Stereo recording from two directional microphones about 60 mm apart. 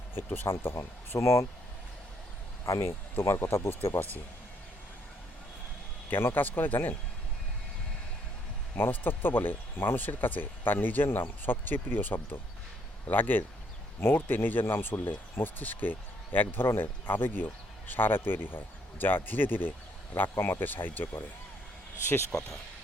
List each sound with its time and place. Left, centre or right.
0.4 s speech: left
2.6 s speech: left
6.1 s speech: left
8.7 s speech: left